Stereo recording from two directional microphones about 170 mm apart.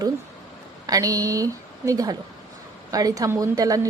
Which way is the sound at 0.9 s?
20° right (ahead or behind).